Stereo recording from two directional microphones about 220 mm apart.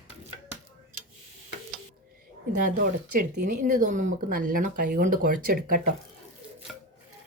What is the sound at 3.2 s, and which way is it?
Speech, 40° right (ahead or behind).